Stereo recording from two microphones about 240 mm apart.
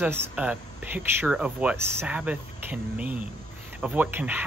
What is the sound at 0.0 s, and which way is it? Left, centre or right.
Speech, centre.